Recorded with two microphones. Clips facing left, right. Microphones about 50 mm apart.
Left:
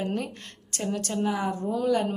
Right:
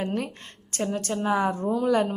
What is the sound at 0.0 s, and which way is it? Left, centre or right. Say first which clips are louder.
Speech: right 1 dB; right.